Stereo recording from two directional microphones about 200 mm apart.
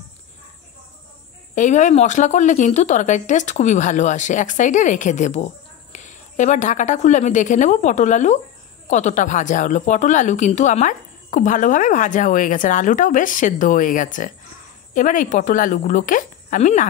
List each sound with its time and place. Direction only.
1.5 s speech: 40° left (ahead or behind)